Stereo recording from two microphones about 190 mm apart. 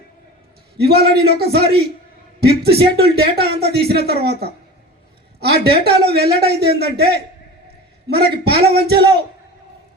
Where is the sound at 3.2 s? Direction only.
55° right (ahead or behind).